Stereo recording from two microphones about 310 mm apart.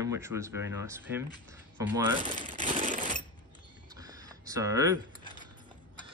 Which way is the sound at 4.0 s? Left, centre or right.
Centre.